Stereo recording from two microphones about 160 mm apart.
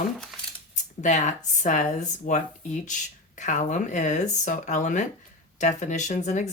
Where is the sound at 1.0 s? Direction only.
50° left (ahead or behind).